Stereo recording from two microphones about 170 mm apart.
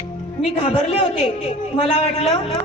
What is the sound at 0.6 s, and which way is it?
Speech, 40° left (ahead or behind).